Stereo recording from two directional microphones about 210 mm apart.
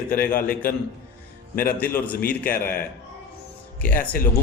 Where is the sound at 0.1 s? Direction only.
10° left (ahead or behind).